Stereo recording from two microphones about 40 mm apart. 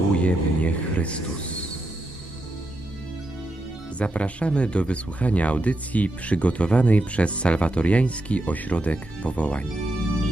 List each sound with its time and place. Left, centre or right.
0.2 s speech: left
3.9 s speech: left